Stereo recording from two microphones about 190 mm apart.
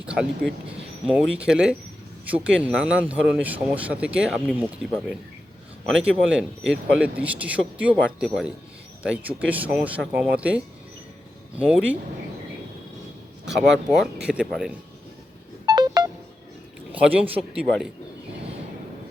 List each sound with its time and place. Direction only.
0.0 s speech: 5° right (ahead or behind)
13.5 s speech: centre (ahead or behind)
15.6 s telephone dialing: 20° right (ahead or behind)
16.9 s speech: 5° right (ahead or behind)